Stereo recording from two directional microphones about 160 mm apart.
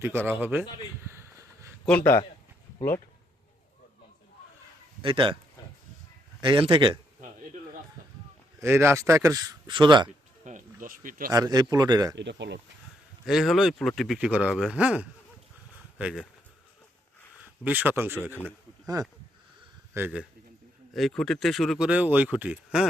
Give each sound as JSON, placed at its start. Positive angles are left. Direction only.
{"t": 0.0, "sound": "a man's voice", "side_deg": -15}
{"t": 1.0, "sound": "a sound", "side_deg": -15}
{"t": 5.0, "sound": "speech", "side_deg": -35}
{"t": 6.4, "sound": "speech", "side_deg": -30}
{"t": 8.6, "sound": "a man's voice", "side_deg": -15}
{"t": 10.4, "sound": "a sound", "side_deg": -55}
{"t": 11.3, "sound": "a man's voice", "side_deg": -25}
{"t": 12.1, "sound": "speech", "side_deg": -90}
{"t": 13.2, "sound": "speech", "side_deg": 0}
{"t": 17.4, "sound": "a man's voice", "side_deg": -10}
{"t": 19.9, "sound": "speech", "side_deg": -10}
{"t": 20.9, "sound": "speech", "side_deg": 0}